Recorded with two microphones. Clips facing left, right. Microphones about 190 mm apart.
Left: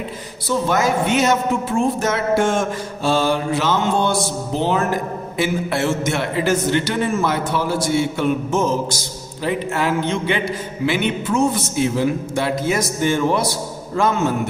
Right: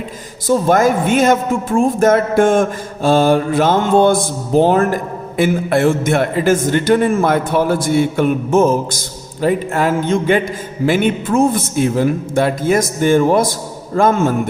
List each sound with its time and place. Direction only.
0.4 s speech: 50° right (ahead or behind)